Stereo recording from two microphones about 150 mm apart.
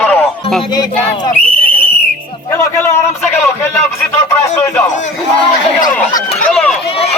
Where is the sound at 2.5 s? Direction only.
15° left (ahead or behind).